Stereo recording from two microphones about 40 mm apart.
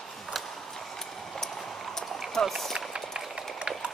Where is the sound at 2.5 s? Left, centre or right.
Centre.